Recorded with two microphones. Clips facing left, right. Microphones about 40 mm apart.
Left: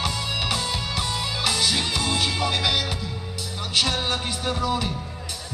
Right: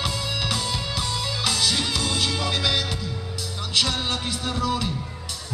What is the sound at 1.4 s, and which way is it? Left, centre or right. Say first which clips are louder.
Music: even; centre.